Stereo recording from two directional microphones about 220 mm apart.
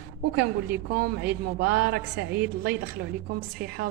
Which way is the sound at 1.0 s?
45° right (ahead or behind).